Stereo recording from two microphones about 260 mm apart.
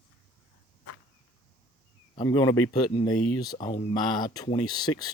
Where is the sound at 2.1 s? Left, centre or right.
Centre.